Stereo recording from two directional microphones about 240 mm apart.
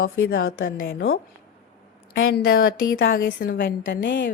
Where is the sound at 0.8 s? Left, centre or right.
Left.